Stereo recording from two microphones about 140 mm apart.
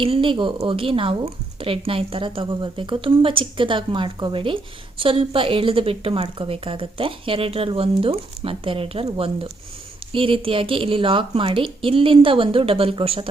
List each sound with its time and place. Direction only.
0.0 s a woman's voice: 40° right (ahead or behind)